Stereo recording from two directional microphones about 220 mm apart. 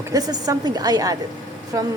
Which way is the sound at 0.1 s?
15° right (ahead or behind).